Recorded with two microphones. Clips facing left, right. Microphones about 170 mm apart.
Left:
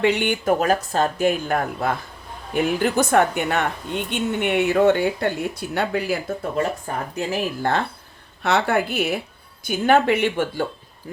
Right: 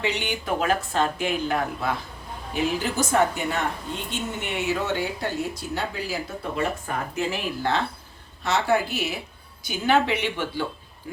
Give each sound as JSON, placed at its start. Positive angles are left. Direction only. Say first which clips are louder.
{"t": 0.0, "sound": "speech", "louder": "left 8 dB", "side_deg": 55}
{"t": 6.6, "sound": "speech", "louder": "left 1 dB", "side_deg": 40}
{"t": 8.4, "sound": "speech", "louder": "left 3 dB", "side_deg": 60}